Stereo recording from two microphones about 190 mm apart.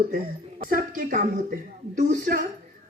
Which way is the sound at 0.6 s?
45° right (ahead or behind).